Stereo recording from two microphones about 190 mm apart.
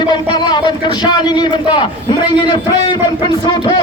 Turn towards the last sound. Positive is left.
turn(degrees=25)  # may be behind; listen again after turning